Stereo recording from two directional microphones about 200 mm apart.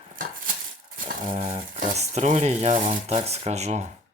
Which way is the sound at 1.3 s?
30° right (ahead or behind).